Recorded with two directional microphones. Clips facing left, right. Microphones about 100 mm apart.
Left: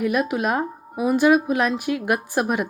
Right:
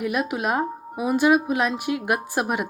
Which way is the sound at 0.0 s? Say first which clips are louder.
Left 3 dB; 15° right (ahead or behind).